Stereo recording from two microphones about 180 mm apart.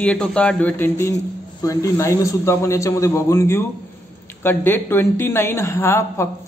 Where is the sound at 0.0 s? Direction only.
5° left (ahead or behind).